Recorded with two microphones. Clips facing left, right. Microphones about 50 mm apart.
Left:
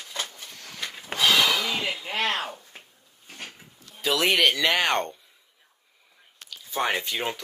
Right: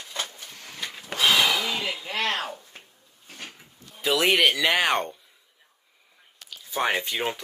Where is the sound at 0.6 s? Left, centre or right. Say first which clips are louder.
Even; right.